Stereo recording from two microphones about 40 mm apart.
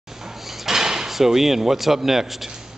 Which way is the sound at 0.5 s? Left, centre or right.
Centre.